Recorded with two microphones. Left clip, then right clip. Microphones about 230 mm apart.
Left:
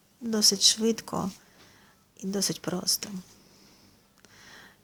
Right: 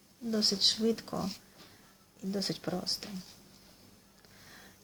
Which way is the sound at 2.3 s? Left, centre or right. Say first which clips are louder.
Left 5 dB; left.